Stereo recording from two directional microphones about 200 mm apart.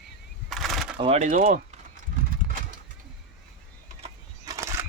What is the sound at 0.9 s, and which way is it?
Speech, 30° right (ahead or behind).